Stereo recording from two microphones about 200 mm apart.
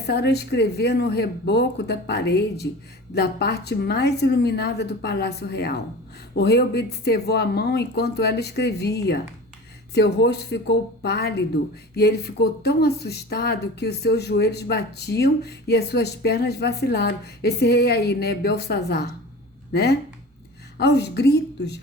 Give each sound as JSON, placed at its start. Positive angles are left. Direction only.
{"t": 0.1, "sound": "speech", "side_deg": 55}